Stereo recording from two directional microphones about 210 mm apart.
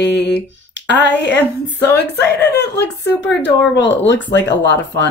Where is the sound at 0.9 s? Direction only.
55° left (ahead or behind).